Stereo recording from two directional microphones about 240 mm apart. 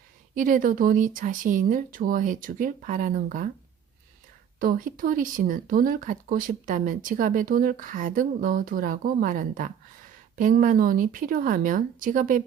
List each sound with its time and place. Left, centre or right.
0.3 s speech: right
4.6 s speech: right